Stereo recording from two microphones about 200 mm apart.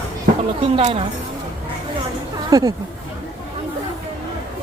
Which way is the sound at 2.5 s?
20° right (ahead or behind).